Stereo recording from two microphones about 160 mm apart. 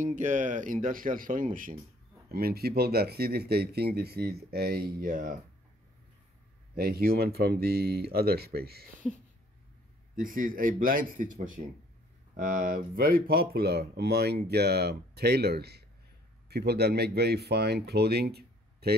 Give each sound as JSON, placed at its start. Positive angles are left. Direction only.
{"t": 0.0, "sound": "speech", "side_deg": -50}
{"t": 2.3, "sound": "speech", "side_deg": -75}
{"t": 6.7, "sound": "speech", "side_deg": -70}
{"t": 10.1, "sound": "speech", "side_deg": -60}